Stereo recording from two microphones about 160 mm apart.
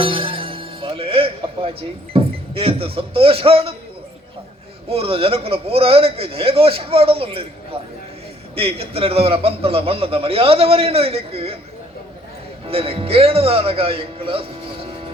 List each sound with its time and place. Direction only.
0.0 s music: 35° right (ahead or behind)
2.1 s speech: 35° right (ahead or behind)
4.9 s a man's voice: 35° right (ahead or behind)
12.6 s a man's voice: 35° right (ahead or behind)